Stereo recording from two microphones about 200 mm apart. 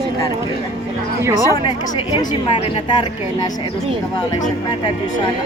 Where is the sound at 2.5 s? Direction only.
30° left (ahead or behind).